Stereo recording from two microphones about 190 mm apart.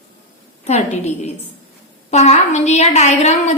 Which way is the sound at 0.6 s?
35° left (ahead or behind).